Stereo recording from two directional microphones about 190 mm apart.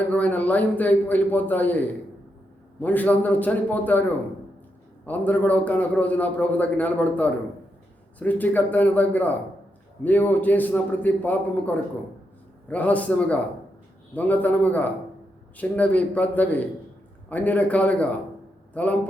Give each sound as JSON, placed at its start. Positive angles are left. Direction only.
{"t": 0.1, "sound": "a man's voice", "side_deg": 10}
{"t": 2.8, "sound": "a man's voice", "side_deg": 10}
{"t": 5.0, "sound": "a man's voice", "side_deg": 10}